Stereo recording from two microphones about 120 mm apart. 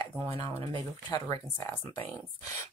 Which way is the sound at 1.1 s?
30° left (ahead or behind).